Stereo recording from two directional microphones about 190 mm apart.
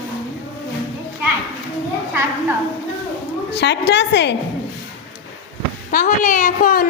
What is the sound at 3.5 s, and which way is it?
Speech, 65° left (ahead or behind).